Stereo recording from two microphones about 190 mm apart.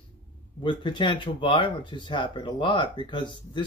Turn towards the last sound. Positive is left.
turn(degrees=25)  # may be behind; listen again after turning